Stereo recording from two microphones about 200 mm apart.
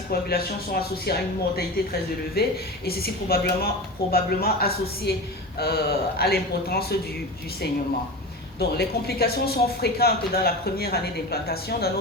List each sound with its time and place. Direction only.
0.1 s speech: 50° left (ahead or behind)
8.5 s speech: 55° left (ahead or behind)